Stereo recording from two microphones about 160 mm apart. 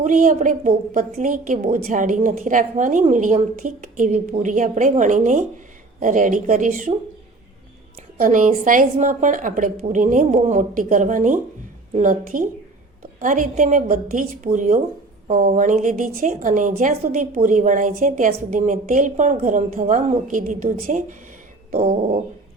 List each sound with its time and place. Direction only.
0.0 s a woman's voice: 55° right (ahead or behind)
8.2 s a woman's voice: 50° right (ahead or behind)
21.8 s dog: 35° right (ahead or behind)